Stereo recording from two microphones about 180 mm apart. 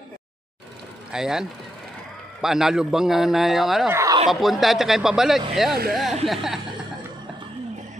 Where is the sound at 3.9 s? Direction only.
20° right (ahead or behind).